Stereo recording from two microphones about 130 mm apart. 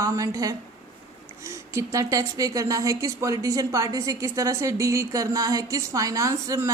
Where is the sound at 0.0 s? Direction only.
25° right (ahead or behind).